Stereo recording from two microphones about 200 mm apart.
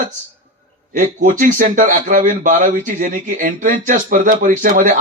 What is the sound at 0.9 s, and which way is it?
Speech, 40° right (ahead or behind).